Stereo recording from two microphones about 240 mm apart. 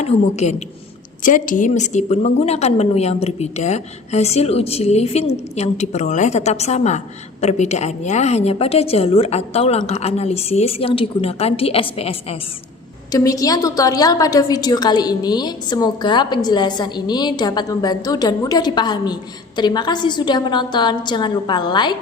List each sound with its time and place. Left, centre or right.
0.0 s a woman's voice: left